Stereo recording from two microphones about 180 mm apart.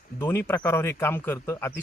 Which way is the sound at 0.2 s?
15° left (ahead or behind).